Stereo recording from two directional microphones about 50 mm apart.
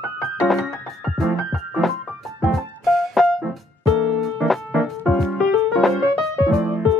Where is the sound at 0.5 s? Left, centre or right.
Centre.